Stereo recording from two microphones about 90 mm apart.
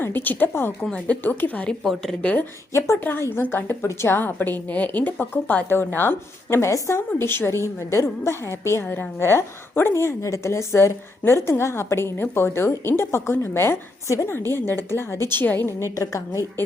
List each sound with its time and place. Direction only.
0.0 s a woman's voice: 20° left (ahead or behind)
0.8 s speech: 10° left (ahead or behind)
1.8 s a woman's voice: centre (ahead or behind)
2.7 s a woman's voice: 30° left (ahead or behind)